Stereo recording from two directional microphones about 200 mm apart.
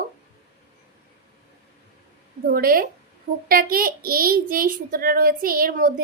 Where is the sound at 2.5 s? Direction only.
45° right (ahead or behind).